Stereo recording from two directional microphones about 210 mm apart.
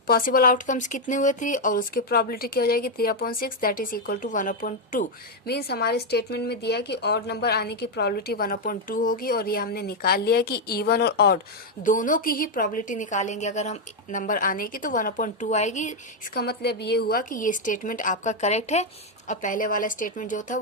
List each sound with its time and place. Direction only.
0.1 s a woman's voice: 45° left (ahead or behind)
5.5 s a woman's voice: 50° left (ahead or behind)